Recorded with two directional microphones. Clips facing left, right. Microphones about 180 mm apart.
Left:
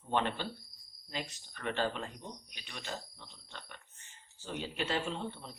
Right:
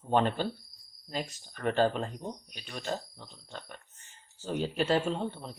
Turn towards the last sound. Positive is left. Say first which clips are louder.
# right 6 dB
turn(degrees=-45)  # may be behind; listen again after turning